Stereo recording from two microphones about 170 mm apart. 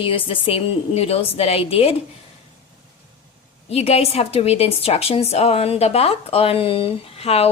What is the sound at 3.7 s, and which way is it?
A woman's voice, 40° left (ahead or behind).